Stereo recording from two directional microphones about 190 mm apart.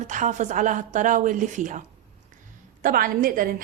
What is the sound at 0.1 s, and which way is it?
A woman's voice, 40° right (ahead or behind).